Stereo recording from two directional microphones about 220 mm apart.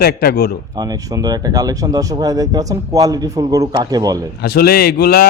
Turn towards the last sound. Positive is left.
turn(degrees=45)  # may be behind; listen again after turning